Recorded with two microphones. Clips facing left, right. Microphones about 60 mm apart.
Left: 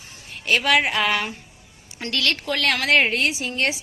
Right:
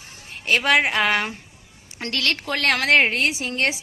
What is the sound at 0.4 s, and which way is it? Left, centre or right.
A woman's voice, right.